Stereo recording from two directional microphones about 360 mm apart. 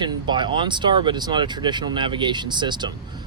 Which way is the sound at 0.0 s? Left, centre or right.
Centre.